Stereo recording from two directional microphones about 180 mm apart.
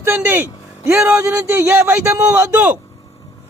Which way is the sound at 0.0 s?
10° right (ahead or behind).